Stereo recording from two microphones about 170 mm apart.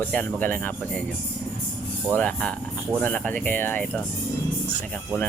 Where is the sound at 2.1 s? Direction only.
5° left (ahead or behind).